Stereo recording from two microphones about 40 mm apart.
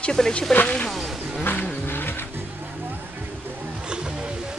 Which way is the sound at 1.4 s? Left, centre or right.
Left.